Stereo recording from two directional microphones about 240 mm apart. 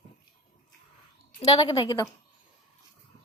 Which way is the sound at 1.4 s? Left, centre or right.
Left.